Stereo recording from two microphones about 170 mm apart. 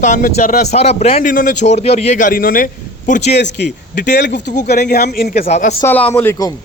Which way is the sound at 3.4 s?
90° left.